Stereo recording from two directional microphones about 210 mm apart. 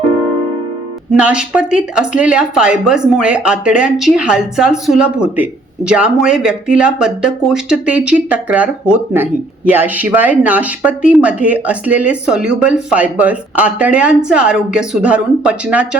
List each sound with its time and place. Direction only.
1.2 s speech: 5° right (ahead or behind)